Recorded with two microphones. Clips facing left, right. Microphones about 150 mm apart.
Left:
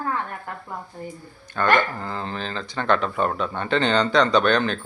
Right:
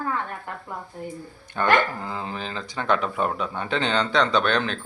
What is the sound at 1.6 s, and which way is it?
Speech, 15° right (ahead or behind).